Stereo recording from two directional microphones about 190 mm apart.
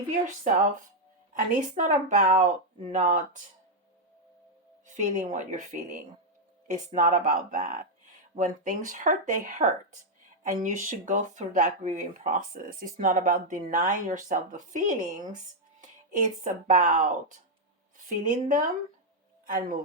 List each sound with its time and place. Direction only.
0.4 s speech: 40° right (ahead or behind)
4.9 s a woman's voice: 40° right (ahead or behind)